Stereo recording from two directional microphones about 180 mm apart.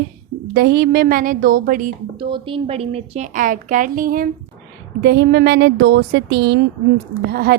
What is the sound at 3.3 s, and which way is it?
Speech, 45° right (ahead or behind).